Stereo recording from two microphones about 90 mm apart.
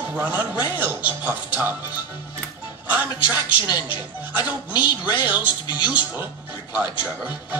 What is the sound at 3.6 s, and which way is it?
Speech, 55° left (ahead or behind).